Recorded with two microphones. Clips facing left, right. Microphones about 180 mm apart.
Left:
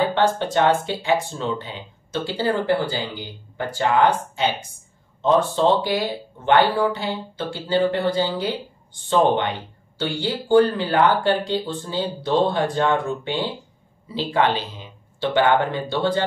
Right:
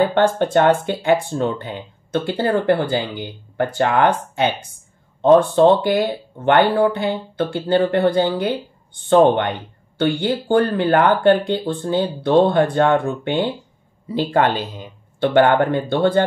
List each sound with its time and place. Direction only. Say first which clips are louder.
0.1 s speech: right 4 dB; 55° right (ahead or behind)